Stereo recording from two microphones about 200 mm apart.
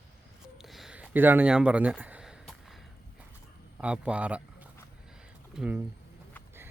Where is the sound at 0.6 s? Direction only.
Centre (ahead or behind).